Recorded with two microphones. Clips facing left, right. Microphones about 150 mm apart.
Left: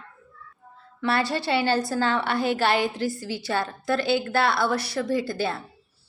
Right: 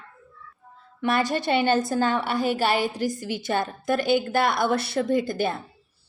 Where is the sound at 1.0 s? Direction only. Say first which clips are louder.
Right 1 dB; 15° right (ahead or behind).